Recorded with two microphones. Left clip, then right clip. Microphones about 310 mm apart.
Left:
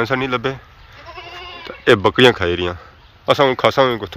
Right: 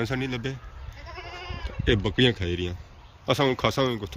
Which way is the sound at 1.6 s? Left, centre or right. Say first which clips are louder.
Left 13 dB; centre.